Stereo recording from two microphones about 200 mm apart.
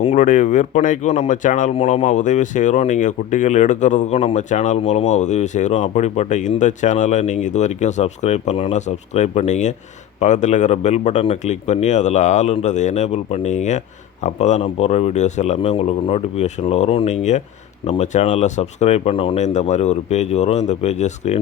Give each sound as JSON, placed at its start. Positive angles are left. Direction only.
{"t": 0.0, "sound": "speech", "side_deg": 35}